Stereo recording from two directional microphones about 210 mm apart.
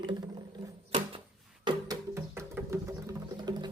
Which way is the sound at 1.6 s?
15° right (ahead or behind).